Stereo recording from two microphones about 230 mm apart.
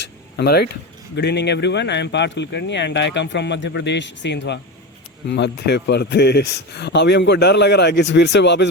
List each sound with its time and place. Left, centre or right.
0.3 s speech: left